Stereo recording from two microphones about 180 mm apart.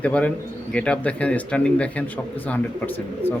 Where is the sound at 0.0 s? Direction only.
5° left (ahead or behind).